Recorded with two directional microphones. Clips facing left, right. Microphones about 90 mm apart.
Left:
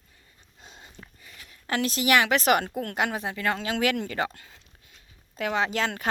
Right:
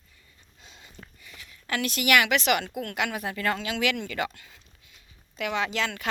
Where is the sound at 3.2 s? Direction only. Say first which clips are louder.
Even; 20° left (ahead or behind).